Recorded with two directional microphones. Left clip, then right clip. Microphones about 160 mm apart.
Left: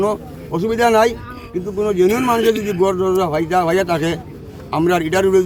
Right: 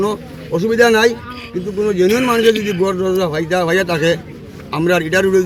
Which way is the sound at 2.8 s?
20° left (ahead or behind).